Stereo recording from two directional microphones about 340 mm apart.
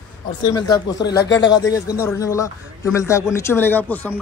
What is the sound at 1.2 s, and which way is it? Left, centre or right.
Speech, left.